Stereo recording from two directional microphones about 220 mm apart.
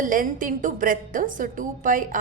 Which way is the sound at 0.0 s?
35° right (ahead or behind).